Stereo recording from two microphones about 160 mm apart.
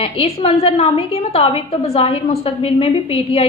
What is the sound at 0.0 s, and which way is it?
A woman's voice, 35° left (ahead or behind).